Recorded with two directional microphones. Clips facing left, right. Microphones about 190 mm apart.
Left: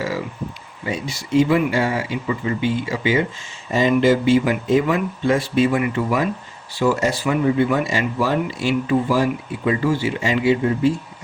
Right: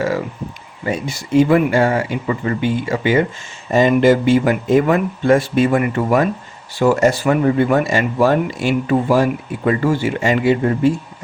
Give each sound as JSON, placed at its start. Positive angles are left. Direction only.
{"t": 0.9, "sound": "speech", "side_deg": -50}